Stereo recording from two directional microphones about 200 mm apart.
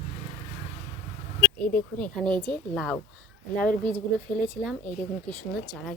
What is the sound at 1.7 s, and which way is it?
A child's voice, 5° left (ahead or behind).